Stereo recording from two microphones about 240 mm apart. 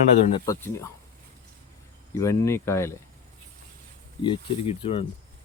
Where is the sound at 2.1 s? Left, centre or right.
Centre.